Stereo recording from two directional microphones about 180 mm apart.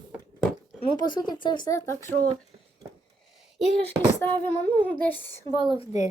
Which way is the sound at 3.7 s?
70° right (ahead or behind).